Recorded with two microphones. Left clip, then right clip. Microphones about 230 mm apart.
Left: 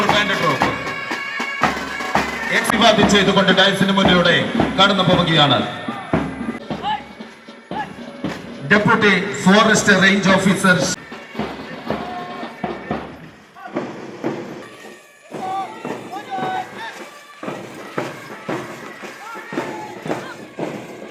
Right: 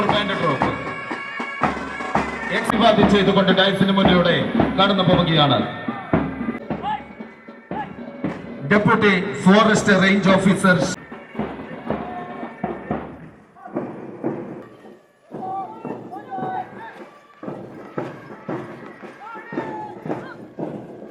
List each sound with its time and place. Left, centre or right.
0.0 s bagpipes: centre
7.8 s music: centre
13.8 s train: centre
15.8 s a sound: centre